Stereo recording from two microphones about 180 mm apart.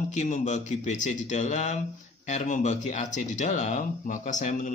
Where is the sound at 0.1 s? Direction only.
40° left (ahead or behind).